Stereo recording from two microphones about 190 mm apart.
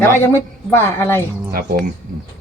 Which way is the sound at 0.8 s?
15° left (ahead or behind).